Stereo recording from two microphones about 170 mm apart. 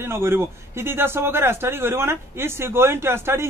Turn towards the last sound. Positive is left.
turn(degrees=-15)  # may be behind; listen again after turning